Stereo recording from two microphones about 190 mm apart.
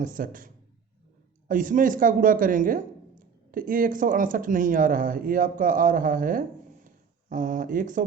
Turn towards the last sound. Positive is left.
turn(degrees=-45)  # may be behind; listen again after turning